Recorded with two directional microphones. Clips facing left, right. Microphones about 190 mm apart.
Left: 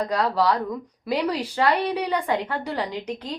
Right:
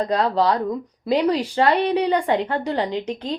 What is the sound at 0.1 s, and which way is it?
A woman's voice, 30° right (ahead or behind).